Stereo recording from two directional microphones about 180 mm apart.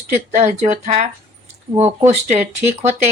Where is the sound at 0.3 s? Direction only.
40° right (ahead or behind).